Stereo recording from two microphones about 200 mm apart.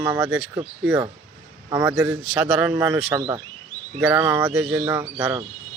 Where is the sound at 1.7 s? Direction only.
15° right (ahead or behind).